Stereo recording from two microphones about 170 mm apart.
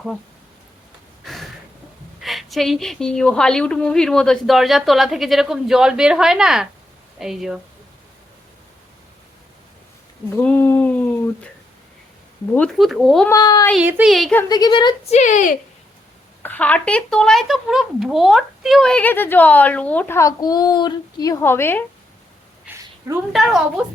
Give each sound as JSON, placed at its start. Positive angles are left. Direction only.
{"t": 1.2, "sound": "a sound", "side_deg": 0}
{"t": 2.2, "sound": "a woman's voice", "side_deg": 0}
{"t": 10.3, "sound": "speech", "side_deg": 10}
{"t": 12.5, "sound": "a woman's voice", "side_deg": 5}
{"t": 13.2, "sound": "a woman's voice", "side_deg": 20}
{"t": 13.7, "sound": "a woman's voice", "side_deg": -10}
{"t": 14.5, "sound": "a woman's voice", "side_deg": 25}
{"t": 15.1, "sound": "speech", "side_deg": 45}
{"t": 16.4, "sound": "speech", "side_deg": 10}
{"t": 22.7, "sound": "a sound", "side_deg": -10}
{"t": 23.3, "sound": "a woman's voice", "side_deg": 0}